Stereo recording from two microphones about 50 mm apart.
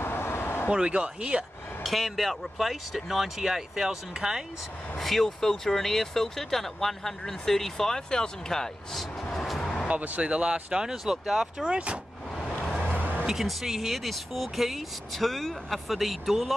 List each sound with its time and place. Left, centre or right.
0.0 s vehicle: left
0.7 s speech: right
1.8 s speech: centre
4.9 s speech: centre
9.8 s speech: right
10.2 s speech: centre
11.6 s speech: right
12.6 s vehicle: centre
12.9 s music: right
13.3 s speech: centre